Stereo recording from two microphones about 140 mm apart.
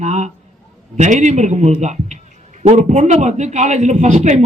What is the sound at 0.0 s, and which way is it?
A man's voice, 55° right (ahead or behind).